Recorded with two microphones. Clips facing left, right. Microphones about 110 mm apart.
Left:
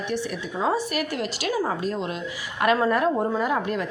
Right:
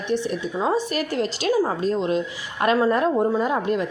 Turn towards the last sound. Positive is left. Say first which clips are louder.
# right 3 dB
turn(degrees=-20)  # may be behind; listen again after turning